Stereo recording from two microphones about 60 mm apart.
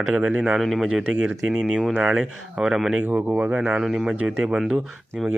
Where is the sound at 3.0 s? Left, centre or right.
Right.